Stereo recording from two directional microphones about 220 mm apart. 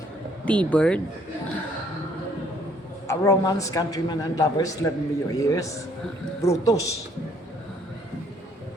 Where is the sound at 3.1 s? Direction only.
15° left (ahead or behind).